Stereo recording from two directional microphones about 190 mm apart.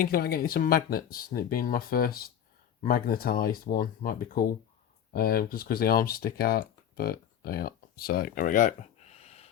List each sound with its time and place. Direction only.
0.0 s speech: 50° left (ahead or behind); by 9.5 s 35° left (ahead or behind)